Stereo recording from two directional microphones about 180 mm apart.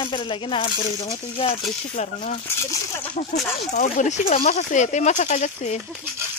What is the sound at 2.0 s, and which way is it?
Speech, 45° left (ahead or behind).